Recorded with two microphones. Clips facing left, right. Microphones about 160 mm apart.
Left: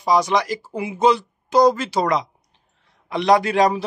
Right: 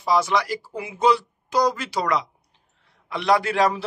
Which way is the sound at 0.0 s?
15° left (ahead or behind).